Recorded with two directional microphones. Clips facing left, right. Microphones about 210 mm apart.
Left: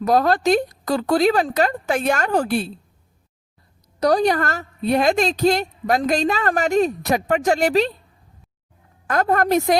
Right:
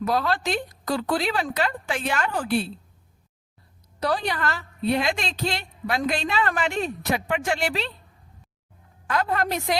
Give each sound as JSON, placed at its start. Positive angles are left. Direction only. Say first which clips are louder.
{"t": 0.0, "sound": "a woman's voice", "louder": "left 7 dB", "side_deg": 45}
{"t": 4.0, "sound": "a woman's voice", "louder": "left 8 dB", "side_deg": 40}
{"t": 9.0, "sound": "a woman's voice", "louder": "left 6 dB", "side_deg": 45}